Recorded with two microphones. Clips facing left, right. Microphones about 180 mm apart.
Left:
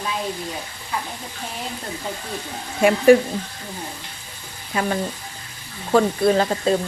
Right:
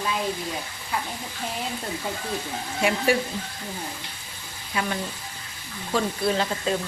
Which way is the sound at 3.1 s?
50° left (ahead or behind).